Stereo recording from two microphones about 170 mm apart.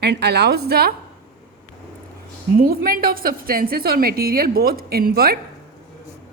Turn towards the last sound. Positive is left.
turn(degrees=-60)  # may be behind; listen again after turning